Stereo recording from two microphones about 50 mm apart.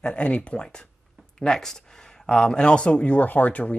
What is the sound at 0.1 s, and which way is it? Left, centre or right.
Speech, left.